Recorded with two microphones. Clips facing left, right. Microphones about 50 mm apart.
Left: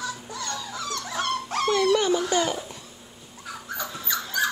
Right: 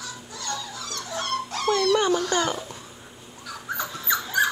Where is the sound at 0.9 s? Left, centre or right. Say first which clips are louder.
Left 1 dB; left.